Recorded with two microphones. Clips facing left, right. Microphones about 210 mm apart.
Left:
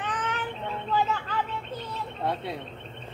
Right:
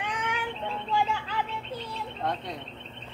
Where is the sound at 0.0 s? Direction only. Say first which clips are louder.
Left 1 dB; 10° right (ahead or behind).